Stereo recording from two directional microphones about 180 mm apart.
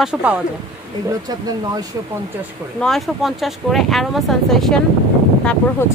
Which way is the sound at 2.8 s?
Centre (ahead or behind).